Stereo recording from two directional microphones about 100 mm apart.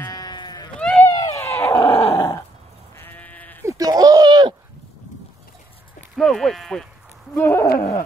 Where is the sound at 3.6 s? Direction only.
35° right (ahead or behind).